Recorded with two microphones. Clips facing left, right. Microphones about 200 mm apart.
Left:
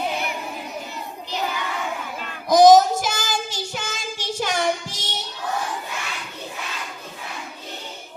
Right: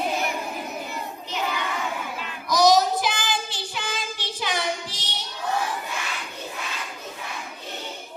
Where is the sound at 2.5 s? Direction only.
50° left (ahead or behind).